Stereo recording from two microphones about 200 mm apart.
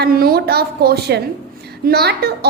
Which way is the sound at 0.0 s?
50° right (ahead or behind).